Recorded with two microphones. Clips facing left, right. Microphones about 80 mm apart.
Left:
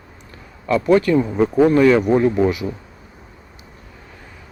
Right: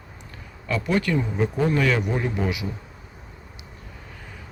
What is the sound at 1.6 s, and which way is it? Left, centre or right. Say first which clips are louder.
Speech: left 10 dB; left.